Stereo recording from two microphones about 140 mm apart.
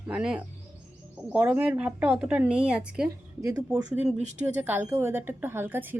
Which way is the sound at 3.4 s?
25° right (ahead or behind).